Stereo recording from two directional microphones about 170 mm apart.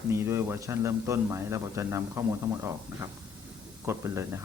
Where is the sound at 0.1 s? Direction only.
15° right (ahead or behind).